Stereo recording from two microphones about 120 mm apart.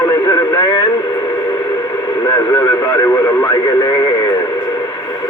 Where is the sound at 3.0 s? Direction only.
25° left (ahead or behind).